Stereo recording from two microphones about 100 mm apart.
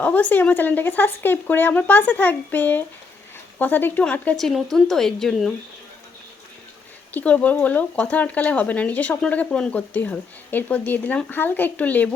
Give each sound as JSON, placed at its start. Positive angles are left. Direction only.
{"t": 0.0, "sound": "speech", "side_deg": 15}
{"t": 4.4, "sound": "speech", "side_deg": 5}
{"t": 7.1, "sound": "speech", "side_deg": 15}